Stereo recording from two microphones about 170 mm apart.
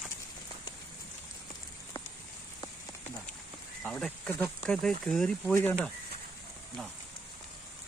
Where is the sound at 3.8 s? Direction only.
5° left (ahead or behind).